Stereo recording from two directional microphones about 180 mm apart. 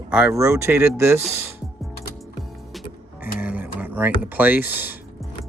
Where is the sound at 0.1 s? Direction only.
5° right (ahead or behind).